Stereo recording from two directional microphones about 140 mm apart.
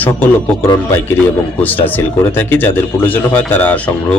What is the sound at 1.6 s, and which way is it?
A man's voice, 10° left (ahead or behind).